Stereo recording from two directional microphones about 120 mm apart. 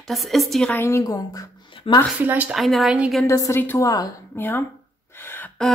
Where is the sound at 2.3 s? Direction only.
15° right (ahead or behind).